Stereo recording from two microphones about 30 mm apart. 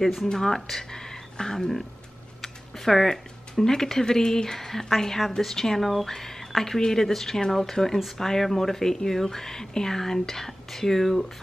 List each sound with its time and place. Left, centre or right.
0.0 s speech: centre
0.3 s speech: centre
0.6 s speech: centre
0.9 s a sound: left
2.4 s speech: centre